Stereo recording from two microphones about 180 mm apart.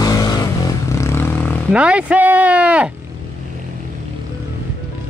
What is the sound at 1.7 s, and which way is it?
Speech, 5° right (ahead or behind).